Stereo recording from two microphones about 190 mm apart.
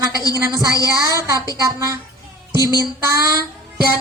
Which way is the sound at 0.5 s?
20° right (ahead or behind).